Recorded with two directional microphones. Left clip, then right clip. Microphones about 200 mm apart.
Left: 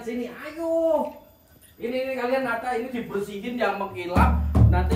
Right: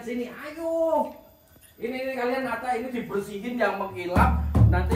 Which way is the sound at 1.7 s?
Centre (ahead or behind).